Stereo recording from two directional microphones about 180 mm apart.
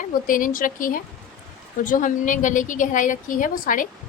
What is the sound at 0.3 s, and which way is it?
A woman's voice, 50° left (ahead or behind).